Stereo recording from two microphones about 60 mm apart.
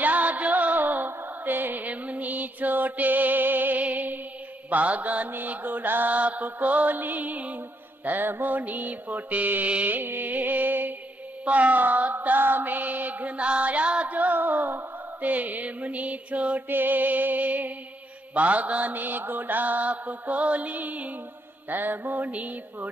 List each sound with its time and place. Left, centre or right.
0.0 s music: right
4.6 s female singing: right